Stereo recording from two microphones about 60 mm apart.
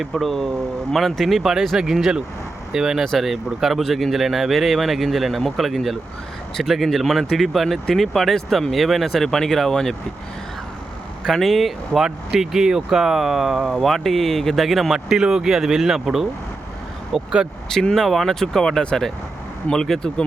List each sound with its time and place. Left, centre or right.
0.0 s speech: centre
11.2 s speech: centre